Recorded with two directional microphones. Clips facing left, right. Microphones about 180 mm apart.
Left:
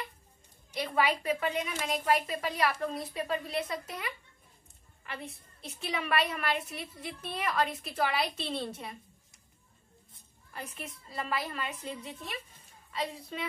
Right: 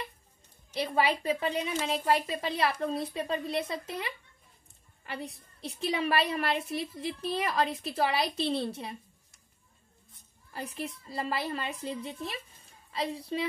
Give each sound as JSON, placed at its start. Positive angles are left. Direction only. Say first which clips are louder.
{"t": 0.7, "sound": "a woman's voice", "louder": "right 2 dB", "side_deg": -30}
{"t": 10.5, "sound": "a child's voice", "louder": "right 5 dB", "side_deg": -35}